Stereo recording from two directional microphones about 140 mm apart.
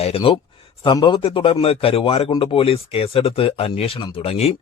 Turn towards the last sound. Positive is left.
turn(degrees=45)  # may be behind; listen again after turning